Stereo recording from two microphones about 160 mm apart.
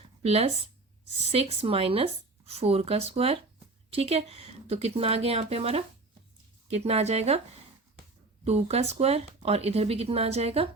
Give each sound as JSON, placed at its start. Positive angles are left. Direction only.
{"t": 0.2, "sound": "speech", "side_deg": -40}
{"t": 8.4, "sound": "speech", "side_deg": -40}